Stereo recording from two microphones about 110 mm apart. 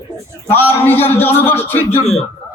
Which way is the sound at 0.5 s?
20° left (ahead or behind).